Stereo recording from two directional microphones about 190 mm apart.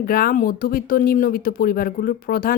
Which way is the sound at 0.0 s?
50° left (ahead or behind).